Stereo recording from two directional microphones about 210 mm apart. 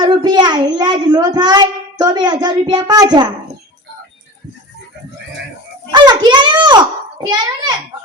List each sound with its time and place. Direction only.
0.0 s a child's voice: 20° right (ahead or behind)
5.9 s a child's voice: 20° right (ahead or behind)